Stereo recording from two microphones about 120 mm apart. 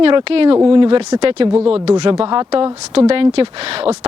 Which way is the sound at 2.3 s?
35° right (ahead or behind).